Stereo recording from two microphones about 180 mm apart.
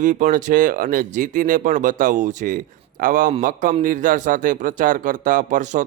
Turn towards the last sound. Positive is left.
turn(degrees=-45)  # may be behind; listen again after turning